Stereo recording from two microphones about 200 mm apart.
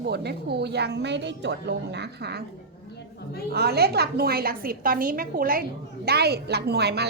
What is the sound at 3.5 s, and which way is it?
A woman's voice, 55° right (ahead or behind).